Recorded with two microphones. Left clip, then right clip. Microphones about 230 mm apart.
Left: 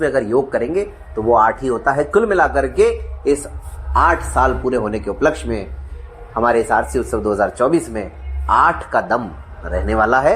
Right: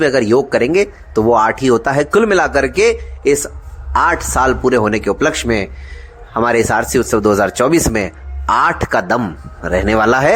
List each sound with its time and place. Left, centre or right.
0.0 s speech: right